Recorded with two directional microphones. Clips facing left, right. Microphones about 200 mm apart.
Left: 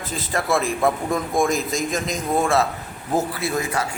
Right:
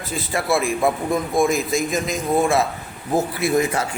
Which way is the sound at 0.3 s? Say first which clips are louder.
Right 1 dB; 10° right (ahead or behind).